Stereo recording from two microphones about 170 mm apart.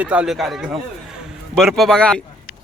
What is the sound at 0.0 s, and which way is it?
Speech, 5° right (ahead or behind).